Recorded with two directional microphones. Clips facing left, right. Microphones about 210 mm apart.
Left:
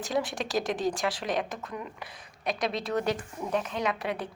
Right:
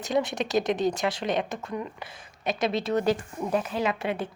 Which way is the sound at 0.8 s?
20° right (ahead or behind).